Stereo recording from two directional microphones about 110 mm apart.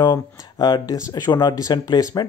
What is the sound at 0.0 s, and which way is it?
Speech, 40° left (ahead or behind).